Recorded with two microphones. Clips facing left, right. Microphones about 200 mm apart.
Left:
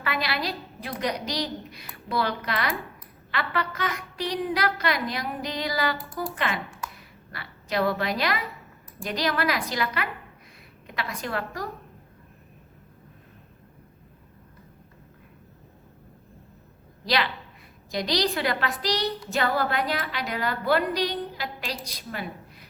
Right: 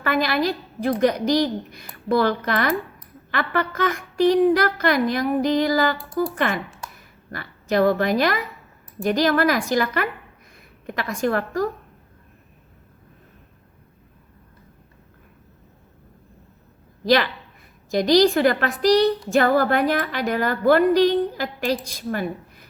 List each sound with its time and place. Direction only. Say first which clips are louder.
0.0 s a woman's voice: right 8 dB; 50° right (ahead or behind)
17.9 s a woman's voice: right 10 dB; 50° right (ahead or behind)